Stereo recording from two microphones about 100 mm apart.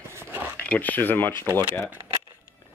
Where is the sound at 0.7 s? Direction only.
15° left (ahead or behind).